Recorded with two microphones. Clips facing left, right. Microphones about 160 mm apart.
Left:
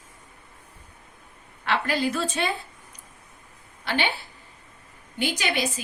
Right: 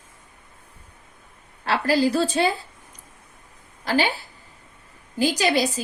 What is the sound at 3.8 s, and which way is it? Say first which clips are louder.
A woman's voice: right 4 dB; 40° right (ahead or behind).